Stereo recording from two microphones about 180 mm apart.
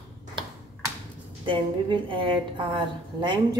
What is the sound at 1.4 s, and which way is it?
A woman's voice, 25° right (ahead or behind).